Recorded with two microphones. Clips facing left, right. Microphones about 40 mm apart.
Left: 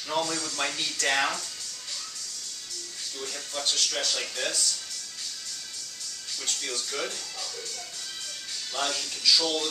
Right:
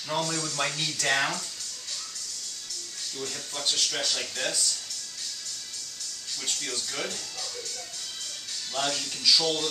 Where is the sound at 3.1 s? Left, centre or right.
Left.